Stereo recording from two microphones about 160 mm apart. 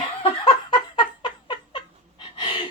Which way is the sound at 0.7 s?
30° left (ahead or behind).